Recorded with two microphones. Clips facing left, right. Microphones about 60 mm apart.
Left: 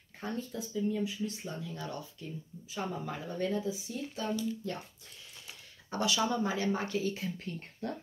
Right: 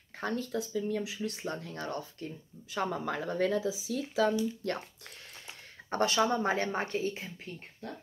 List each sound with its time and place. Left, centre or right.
0.2 s speech: right
4.6 s speech: right
5.9 s speech: right